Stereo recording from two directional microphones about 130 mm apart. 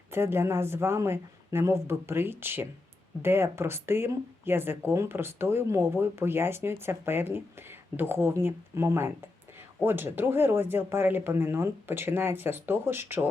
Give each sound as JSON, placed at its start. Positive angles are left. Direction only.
{"t": 0.1, "sound": "speech", "side_deg": -20}